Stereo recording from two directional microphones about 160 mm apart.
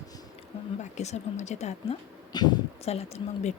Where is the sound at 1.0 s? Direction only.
45° left (ahead or behind).